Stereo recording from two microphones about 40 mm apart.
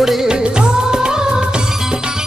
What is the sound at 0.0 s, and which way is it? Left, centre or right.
Music, centre.